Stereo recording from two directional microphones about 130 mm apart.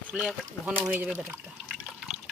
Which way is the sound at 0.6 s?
15° right (ahead or behind).